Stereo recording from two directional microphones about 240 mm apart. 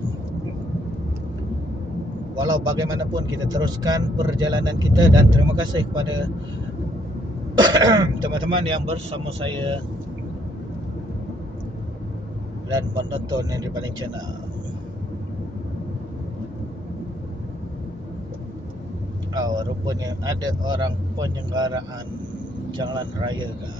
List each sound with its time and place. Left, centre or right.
2.5 s speech: centre
7.5 s speech: centre
13.3 s speech: centre
19.3 s speech: centre